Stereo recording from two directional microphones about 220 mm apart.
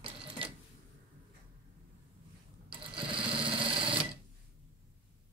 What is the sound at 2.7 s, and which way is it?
Sewing machine, 25° right (ahead or behind).